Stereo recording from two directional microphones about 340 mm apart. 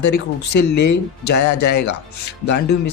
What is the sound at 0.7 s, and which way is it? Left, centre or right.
Speech, left.